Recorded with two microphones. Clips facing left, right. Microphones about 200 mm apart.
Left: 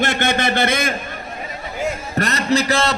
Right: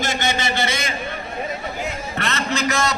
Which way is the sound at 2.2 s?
40° left (ahead or behind).